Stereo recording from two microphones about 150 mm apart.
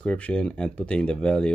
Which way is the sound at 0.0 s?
10° left (ahead or behind).